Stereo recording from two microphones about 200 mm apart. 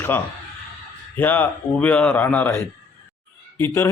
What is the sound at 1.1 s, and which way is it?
A man's voice, 10° left (ahead or behind).